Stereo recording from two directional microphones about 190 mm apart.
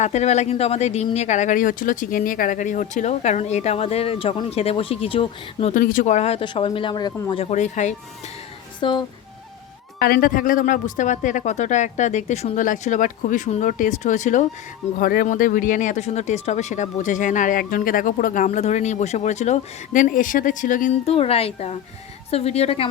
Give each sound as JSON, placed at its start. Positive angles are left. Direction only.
{"t": 0.0, "sound": "speech", "side_deg": 35}
{"t": 5.7, "sound": "speech", "side_deg": 45}
{"t": 8.8, "sound": "speech", "side_deg": 25}
{"t": 10.0, "sound": "speech", "side_deg": 50}